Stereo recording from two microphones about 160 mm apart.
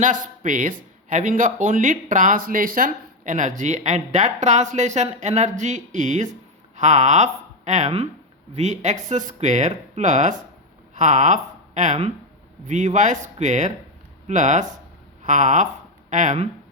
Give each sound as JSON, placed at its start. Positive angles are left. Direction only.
{"t": 0.0, "sound": "speech", "side_deg": -55}